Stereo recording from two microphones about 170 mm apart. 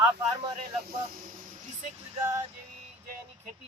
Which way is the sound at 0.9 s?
50° right (ahead or behind).